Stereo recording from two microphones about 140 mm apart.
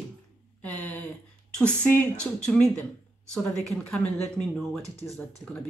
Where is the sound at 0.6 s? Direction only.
10° left (ahead or behind).